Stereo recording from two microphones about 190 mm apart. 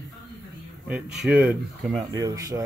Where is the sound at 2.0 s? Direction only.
20° right (ahead or behind).